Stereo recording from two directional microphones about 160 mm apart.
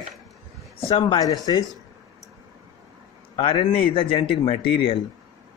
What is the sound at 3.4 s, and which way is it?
Speech, 35° left (ahead or behind).